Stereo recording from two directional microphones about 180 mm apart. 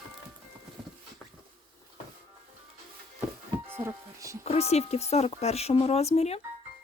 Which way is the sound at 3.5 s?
15° right (ahead or behind).